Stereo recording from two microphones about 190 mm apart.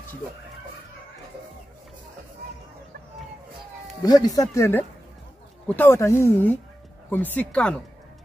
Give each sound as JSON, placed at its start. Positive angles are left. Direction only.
{"t": 4.0, "sound": "speech", "side_deg": 20}